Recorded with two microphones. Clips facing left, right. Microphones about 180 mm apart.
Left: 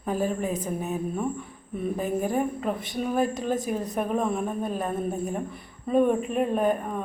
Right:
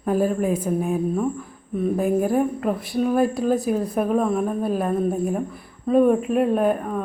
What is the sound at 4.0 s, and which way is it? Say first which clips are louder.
Speech: right 5 dB; centre (ahead or behind).